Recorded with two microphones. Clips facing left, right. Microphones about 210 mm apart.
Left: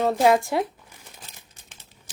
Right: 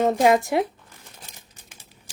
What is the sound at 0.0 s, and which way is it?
Speech, 20° right (ahead or behind).